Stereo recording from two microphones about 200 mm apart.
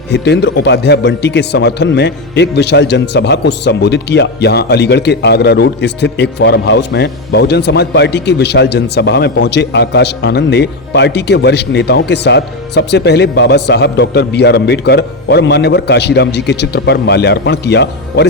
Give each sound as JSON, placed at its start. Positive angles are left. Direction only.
{"t": 0.1, "sound": "a man's voice", "side_deg": 55}